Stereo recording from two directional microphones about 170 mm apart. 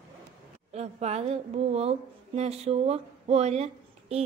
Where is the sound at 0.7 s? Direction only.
40° right (ahead or behind).